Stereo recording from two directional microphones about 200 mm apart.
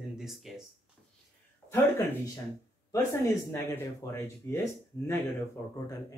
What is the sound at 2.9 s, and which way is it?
Speech, 15° left (ahead or behind).